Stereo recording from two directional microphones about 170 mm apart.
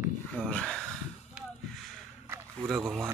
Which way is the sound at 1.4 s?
5° right (ahead or behind).